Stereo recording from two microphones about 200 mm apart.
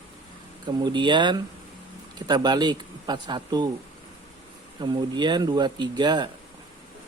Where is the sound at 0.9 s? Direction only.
25° right (ahead or behind).